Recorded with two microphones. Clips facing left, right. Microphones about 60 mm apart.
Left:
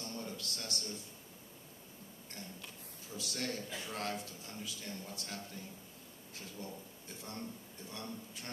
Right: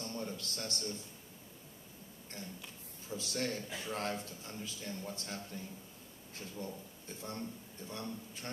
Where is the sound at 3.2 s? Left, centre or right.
Right.